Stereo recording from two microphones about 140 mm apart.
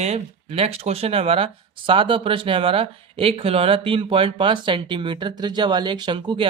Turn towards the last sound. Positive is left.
turn(degrees=-35)  # may be behind; listen again after turning